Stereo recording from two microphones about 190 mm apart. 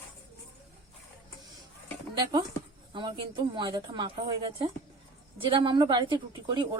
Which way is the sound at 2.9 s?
25° right (ahead or behind).